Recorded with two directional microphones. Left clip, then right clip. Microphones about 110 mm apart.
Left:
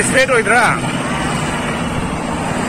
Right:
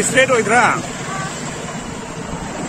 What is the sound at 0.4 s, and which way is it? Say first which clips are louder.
Speech: left 1 dB; 30° right (ahead or behind).